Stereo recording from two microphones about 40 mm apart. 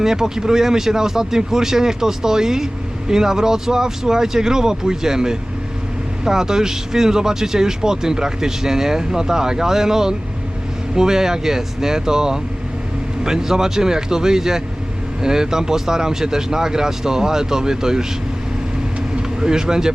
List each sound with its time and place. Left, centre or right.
0.0 s speech: centre
19.1 s vehicle: centre